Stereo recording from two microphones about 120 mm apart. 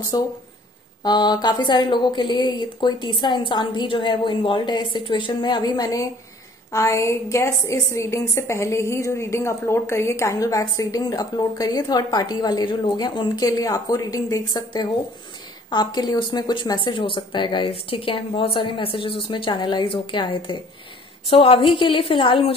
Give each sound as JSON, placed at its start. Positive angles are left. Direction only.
{"t": 0.1, "sound": "a woman's voice", "side_deg": 35}